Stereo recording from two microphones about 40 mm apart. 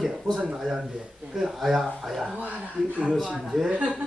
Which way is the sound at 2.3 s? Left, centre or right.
Right.